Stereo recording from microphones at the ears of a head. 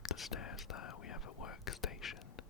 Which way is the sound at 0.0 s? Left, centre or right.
Left.